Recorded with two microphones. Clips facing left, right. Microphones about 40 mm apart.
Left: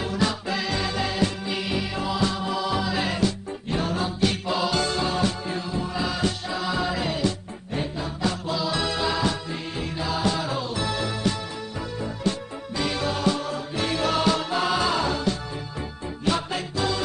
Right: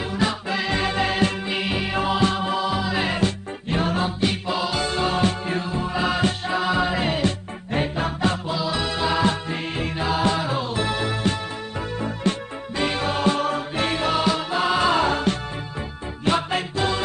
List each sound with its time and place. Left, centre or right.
0.0 s music: right
2.6 s music: centre
3.0 s music: right
4.2 s music: centre
5.0 s music: right
8.5 s music: centre
9.1 s music: right
14.2 s music: centre
14.7 s music: right